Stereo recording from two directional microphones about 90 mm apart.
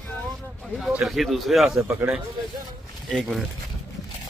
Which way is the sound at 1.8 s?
30° right (ahead or behind).